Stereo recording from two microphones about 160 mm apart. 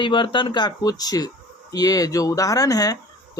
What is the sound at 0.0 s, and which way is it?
Speech, 30° left (ahead or behind).